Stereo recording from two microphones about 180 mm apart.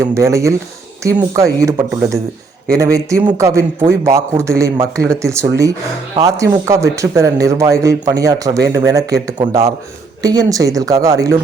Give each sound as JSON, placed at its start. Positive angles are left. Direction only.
{"t": 0.0, "sound": "speech", "side_deg": -15}